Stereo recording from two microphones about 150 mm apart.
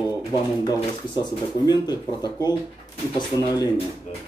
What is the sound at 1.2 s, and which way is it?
Speech, 30° left (ahead or behind).